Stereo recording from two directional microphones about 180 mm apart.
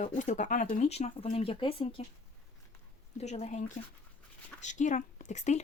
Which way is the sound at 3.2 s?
40° left (ahead or behind).